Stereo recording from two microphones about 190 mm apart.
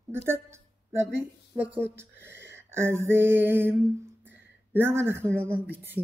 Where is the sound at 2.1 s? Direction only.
65° right (ahead or behind).